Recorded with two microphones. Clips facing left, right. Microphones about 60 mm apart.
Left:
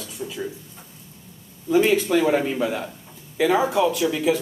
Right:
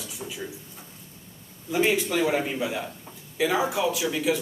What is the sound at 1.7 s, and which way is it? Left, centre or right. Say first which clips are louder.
A man's voice: left 6 dB; centre.